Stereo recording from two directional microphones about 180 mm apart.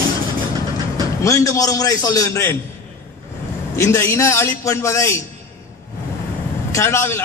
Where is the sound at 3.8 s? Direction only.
15° left (ahead or behind).